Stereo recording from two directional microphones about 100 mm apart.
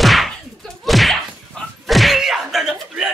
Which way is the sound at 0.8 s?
Centre (ahead or behind).